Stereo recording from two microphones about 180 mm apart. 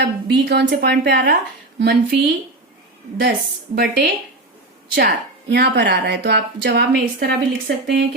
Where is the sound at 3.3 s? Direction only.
65° right (ahead or behind).